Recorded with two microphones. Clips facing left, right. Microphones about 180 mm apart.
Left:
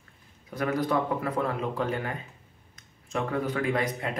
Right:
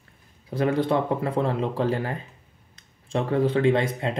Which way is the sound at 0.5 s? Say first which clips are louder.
Right 5 dB; 30° right (ahead or behind).